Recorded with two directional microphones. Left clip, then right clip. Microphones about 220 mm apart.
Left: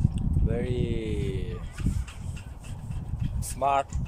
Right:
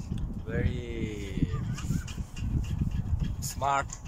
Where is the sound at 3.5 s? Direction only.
10° left (ahead or behind).